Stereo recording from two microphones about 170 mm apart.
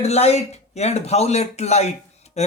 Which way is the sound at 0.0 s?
40° left (ahead or behind).